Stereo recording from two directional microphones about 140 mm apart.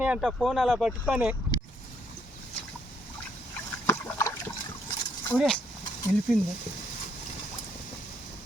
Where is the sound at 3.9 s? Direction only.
20° left (ahead or behind).